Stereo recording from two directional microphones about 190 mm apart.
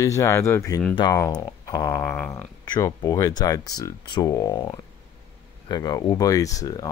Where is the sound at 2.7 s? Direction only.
20° left (ahead or behind).